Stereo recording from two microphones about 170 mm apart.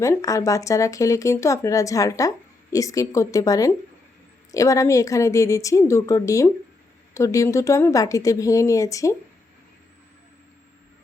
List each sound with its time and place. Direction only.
0.0 s speech: 20° left (ahead or behind)